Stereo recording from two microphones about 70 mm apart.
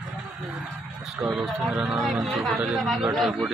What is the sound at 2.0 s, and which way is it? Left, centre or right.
A man's voice, centre.